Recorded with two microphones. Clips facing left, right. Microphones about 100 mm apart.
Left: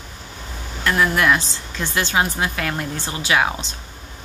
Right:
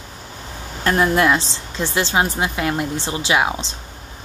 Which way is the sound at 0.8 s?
35° right (ahead or behind).